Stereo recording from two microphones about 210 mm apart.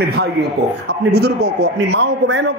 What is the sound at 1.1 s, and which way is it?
A man's voice, 50° right (ahead or behind).